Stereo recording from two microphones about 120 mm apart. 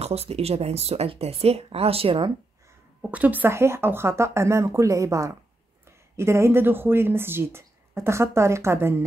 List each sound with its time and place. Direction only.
0.0 s speech: 60° right (ahead or behind)
3.0 s speech: 10° right (ahead or behind)